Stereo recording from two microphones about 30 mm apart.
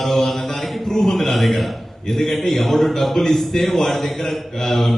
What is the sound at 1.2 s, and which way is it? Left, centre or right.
A man's voice, centre.